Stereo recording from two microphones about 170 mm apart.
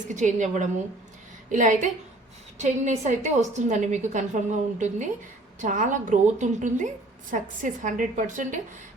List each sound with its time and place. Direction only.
0.1 s a woman's voice: 45° right (ahead or behind)